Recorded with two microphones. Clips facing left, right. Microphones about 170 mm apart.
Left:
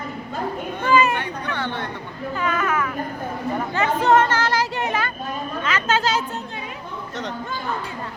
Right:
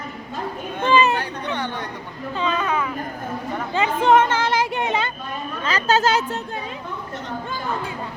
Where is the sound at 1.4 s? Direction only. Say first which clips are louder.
Even; 15° right (ahead or behind).